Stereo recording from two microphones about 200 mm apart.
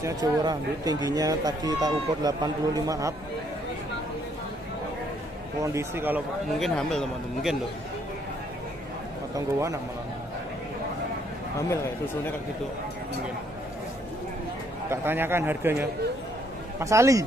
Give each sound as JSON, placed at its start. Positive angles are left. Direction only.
{"t": 0.0, "sound": "speech", "side_deg": -20}
{"t": 5.6, "sound": "a man's voice", "side_deg": -15}
{"t": 6.6, "sound": "speech", "side_deg": 0}
{"t": 9.3, "sound": "a man's voice", "side_deg": -15}
{"t": 14.9, "sound": "a man's voice", "side_deg": -10}